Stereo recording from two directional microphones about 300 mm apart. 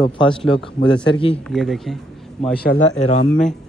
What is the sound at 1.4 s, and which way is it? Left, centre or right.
Speech, centre.